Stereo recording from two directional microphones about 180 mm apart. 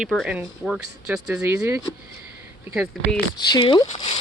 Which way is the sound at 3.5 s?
25° left (ahead or behind).